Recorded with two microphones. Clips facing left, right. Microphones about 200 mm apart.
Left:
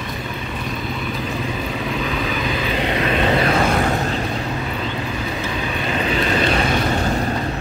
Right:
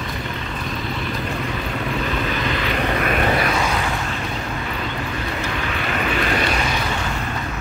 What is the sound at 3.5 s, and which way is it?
Vehicle, 50° left (ahead or behind).